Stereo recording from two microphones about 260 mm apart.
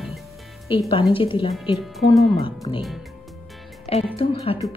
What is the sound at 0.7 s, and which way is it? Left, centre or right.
Music, centre.